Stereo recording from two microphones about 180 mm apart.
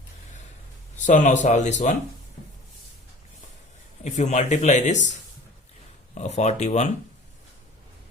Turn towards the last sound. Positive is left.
turn(degrees=40)  # may be behind; listen again after turning